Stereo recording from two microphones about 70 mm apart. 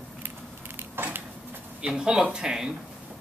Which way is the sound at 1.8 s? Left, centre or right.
Centre.